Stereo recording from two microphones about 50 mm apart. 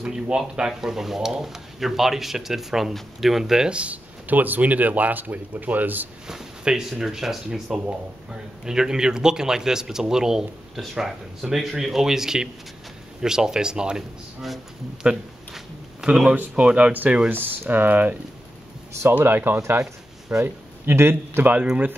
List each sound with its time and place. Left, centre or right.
0.0 s a man's voice: centre
3.7 s a man's voice: right
6.2 s a man's voice: centre
15.0 s a sound: centre
16.5 s speech: right
17.3 s a man's voice: right
19.2 s a man's voice: right
20.3 s speech: right
20.8 s a man's voice: right